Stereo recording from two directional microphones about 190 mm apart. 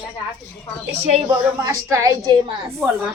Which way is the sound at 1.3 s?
10° right (ahead or behind).